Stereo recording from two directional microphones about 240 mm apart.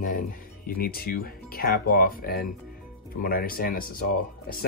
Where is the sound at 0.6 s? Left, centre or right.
Left.